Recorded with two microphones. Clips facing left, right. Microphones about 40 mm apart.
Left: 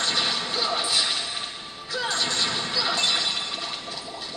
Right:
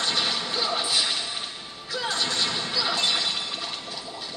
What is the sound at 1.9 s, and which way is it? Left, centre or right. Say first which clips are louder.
Music: left 1 dB; centre.